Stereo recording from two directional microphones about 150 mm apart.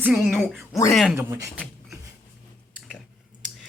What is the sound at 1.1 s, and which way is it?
Speech, 20° right (ahead or behind).